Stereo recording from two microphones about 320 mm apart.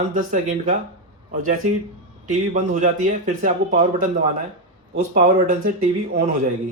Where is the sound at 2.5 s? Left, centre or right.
Right.